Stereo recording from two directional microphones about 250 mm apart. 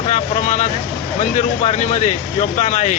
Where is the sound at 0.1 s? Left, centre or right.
Left.